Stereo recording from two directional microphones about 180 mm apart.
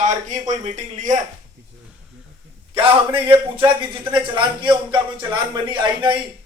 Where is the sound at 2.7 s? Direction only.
30° right (ahead or behind).